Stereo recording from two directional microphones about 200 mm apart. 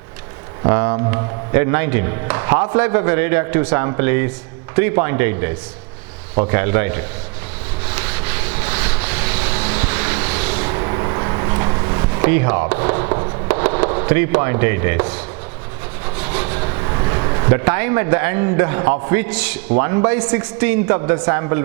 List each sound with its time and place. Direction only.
0.6 s a man's voice: 15° right (ahead or behind)
7.9 s vehicle: 10° right (ahead or behind)
9.5 s vehicle: 30° right (ahead or behind)
9.7 s vehicle: 15° right (ahead or behind)
10.5 s a sound: 25° right (ahead or behind)
12.2 s speech: 15° right (ahead or behind)
13.5 s fireworks: 15° right (ahead or behind)
13.9 s a man's voice: 15° right (ahead or behind)
16.6 s a sound: 25° right (ahead or behind)
17.7 s a man's voice: 10° right (ahead or behind)